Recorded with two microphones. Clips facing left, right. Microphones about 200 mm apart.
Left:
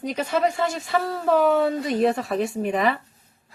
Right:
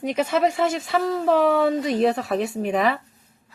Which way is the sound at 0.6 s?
Centre (ahead or behind).